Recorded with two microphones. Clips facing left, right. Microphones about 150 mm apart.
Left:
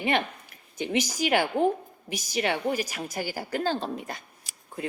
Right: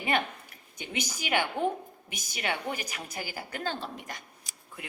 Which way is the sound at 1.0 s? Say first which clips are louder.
Left 1 dB; 40° left (ahead or behind).